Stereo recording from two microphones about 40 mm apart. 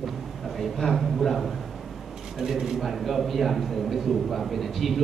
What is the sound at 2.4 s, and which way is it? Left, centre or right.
A man's voice, centre.